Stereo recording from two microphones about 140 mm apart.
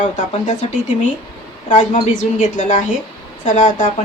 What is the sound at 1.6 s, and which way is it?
Speech, 60° left (ahead or behind).